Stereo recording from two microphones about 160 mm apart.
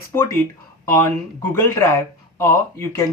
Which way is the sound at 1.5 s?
15° left (ahead or behind).